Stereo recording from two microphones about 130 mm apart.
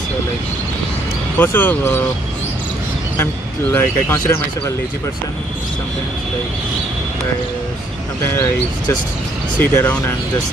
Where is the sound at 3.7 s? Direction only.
20° left (ahead or behind).